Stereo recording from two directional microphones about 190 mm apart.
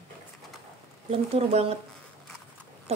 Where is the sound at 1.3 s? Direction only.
30° right (ahead or behind).